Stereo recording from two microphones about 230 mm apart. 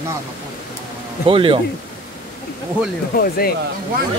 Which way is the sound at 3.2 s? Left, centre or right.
Left.